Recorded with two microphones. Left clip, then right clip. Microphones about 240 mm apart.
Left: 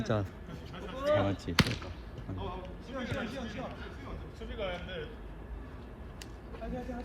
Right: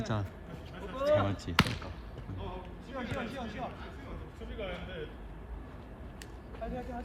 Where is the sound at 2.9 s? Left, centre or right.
Right.